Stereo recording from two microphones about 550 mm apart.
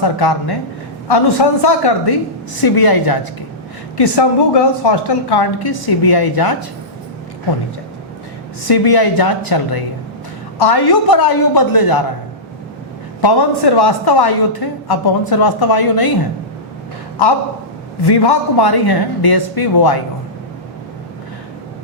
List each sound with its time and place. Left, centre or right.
0.0 s a woman's voice: left
1.6 s a woman's voice: left
8.6 s a woman's voice: left
13.2 s a woman's voice: left
18.0 s a woman's voice: left